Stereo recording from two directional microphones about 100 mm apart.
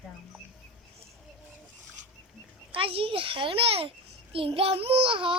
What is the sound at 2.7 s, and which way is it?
A child's voice, 65° right (ahead or behind).